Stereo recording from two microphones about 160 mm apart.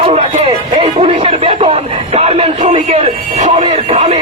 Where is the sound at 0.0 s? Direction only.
35° right (ahead or behind).